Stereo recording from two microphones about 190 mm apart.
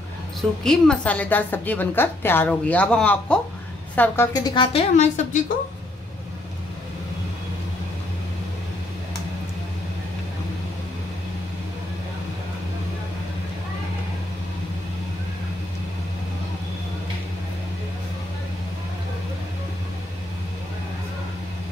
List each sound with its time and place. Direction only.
0.4 s a woman's voice: 5° left (ahead or behind); by 4.8 s 25° left (ahead or behind)
4.9 s a woman's voice: 40° left (ahead or behind)